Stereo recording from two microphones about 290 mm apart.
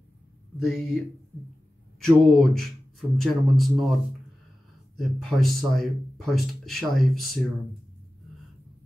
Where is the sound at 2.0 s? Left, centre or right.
Centre.